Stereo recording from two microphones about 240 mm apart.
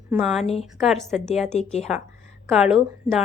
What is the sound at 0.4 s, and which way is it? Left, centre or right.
Speech, left.